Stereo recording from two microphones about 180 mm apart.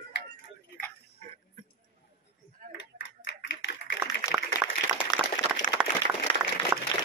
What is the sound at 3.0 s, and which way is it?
Typewriter, 80° left.